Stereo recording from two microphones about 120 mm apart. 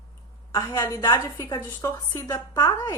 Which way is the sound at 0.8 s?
35° left (ahead or behind).